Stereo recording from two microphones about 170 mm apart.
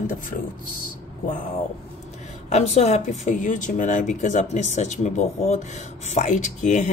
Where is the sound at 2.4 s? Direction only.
40° left (ahead or behind).